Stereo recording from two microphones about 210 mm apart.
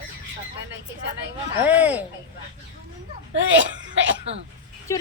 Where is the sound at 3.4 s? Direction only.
60° right (ahead or behind).